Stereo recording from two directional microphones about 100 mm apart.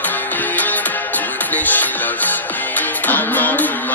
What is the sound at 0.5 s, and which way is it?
Music, 15° left (ahead or behind).